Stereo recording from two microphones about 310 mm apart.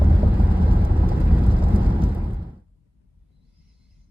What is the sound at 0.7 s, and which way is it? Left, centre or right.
Vehicle, centre.